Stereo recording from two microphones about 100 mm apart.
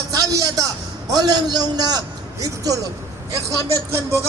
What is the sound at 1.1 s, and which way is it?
A man's voice, 45° right (ahead or behind).